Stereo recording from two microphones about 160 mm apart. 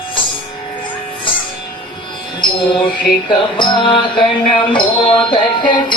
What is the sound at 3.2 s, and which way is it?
Music, 30° left (ahead or behind).